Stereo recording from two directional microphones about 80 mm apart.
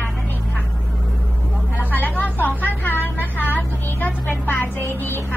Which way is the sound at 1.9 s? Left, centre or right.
Left.